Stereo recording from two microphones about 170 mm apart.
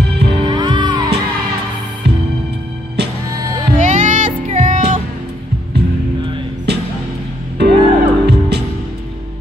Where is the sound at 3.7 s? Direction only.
50° right (ahead or behind).